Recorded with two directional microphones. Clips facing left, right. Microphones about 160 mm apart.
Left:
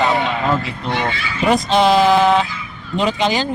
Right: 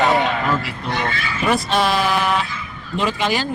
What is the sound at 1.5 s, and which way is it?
A man's voice, 20° left (ahead or behind).